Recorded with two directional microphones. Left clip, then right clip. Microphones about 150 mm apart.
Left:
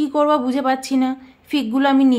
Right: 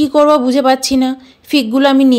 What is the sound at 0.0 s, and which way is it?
A woman's voice, 30° right (ahead or behind).